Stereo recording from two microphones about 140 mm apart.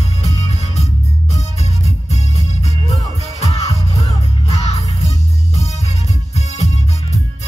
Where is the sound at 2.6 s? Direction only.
50° left (ahead or behind).